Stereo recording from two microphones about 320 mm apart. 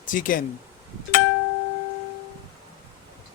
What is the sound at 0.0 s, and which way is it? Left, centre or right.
Speech, left.